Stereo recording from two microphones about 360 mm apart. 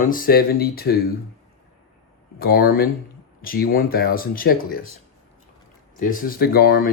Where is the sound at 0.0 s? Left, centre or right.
Left.